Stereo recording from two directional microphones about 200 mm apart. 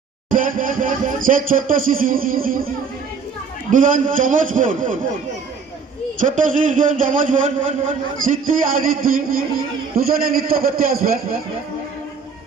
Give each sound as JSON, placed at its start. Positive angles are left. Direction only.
{"t": 0.3, "sound": "music", "side_deg": -45}
{"t": 3.7, "sound": "a man's voice", "side_deg": -40}
{"t": 6.1, "sound": "a man's voice", "side_deg": -40}